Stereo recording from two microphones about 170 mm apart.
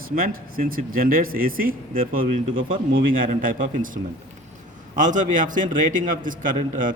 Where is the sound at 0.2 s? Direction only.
55° right (ahead or behind).